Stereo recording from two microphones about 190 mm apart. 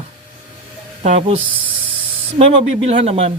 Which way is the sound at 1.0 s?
35° right (ahead or behind).